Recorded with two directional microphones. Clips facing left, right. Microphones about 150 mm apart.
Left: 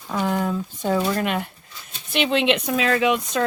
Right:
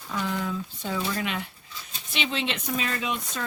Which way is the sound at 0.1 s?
50° left (ahead or behind).